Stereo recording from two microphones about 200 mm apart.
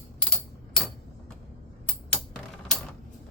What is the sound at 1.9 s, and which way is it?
Typing, 5° left (ahead or behind).